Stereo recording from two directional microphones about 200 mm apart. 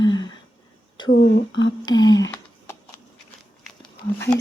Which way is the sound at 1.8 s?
20° left (ahead or behind).